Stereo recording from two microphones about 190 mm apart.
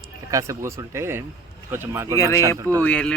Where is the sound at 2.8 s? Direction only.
5° left (ahead or behind).